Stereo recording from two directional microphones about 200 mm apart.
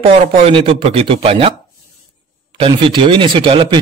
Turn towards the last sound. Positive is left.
turn(degrees=-25)  # may be behind; listen again after turning